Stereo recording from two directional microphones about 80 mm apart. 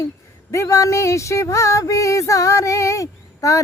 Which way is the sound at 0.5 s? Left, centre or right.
Left.